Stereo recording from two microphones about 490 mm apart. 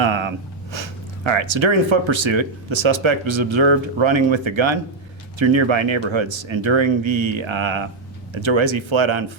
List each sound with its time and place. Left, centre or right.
0.0 s speech: right